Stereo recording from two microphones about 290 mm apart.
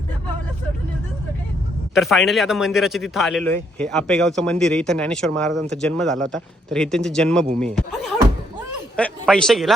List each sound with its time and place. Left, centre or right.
2.0 s speech: centre
9.0 s speech: centre